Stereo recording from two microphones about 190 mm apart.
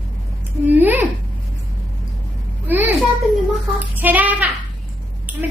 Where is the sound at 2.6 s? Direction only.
10° right (ahead or behind).